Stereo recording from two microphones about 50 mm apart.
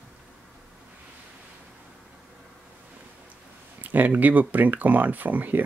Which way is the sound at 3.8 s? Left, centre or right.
Right.